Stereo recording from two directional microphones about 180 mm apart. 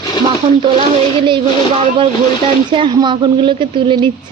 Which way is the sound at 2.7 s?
25° right (ahead or behind).